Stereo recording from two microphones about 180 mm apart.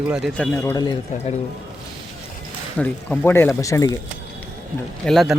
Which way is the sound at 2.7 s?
10° left (ahead or behind).